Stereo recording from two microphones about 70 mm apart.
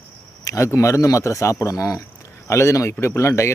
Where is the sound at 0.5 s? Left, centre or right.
Left.